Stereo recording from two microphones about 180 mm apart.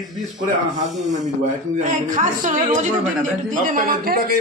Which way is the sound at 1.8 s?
45° right (ahead or behind).